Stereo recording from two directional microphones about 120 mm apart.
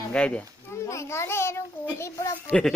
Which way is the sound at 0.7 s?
25° left (ahead or behind).